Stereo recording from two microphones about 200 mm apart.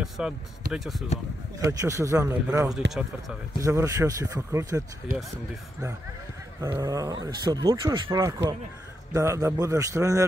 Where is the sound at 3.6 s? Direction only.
15° right (ahead or behind).